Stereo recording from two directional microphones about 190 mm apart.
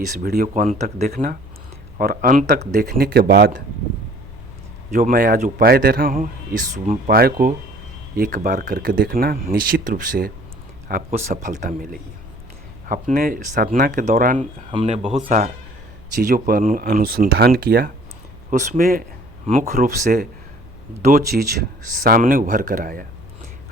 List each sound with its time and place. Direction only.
0.2 s speech: 50° right (ahead or behind)
4.9 s speech: 50° right (ahead or behind)
11.1 s speech: 35° right (ahead or behind)
12.9 s speech: 50° right (ahead or behind)
14.7 s speech: 35° right (ahead or behind)
15.1 s speech: 45° right (ahead or behind)